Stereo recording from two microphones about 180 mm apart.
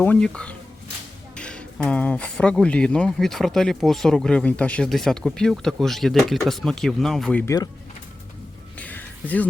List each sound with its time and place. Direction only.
0.0 s speech: 5° left (ahead or behind)
7.4 s speech: 20° left (ahead or behind)
8.8 s music: 10° left (ahead or behind)